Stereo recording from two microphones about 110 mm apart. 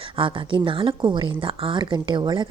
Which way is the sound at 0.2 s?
50° right (ahead or behind).